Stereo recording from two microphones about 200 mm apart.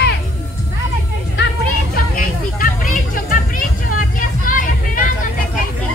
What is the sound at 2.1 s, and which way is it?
Vehicle, 45° left (ahead or behind).